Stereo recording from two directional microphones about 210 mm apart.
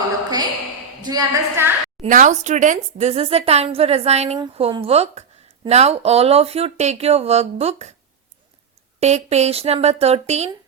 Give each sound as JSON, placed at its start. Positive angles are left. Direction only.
{"t": 1.0, "sound": "a woman's voice", "side_deg": -15}
{"t": 2.0, "sound": "speech", "side_deg": -35}
{"t": 9.0, "sound": "speech", "side_deg": -30}